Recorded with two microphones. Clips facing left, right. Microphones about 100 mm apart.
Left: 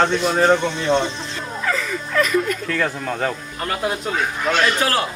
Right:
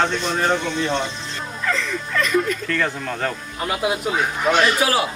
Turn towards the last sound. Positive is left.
turn(degrees=-10)  # may be behind; listen again after turning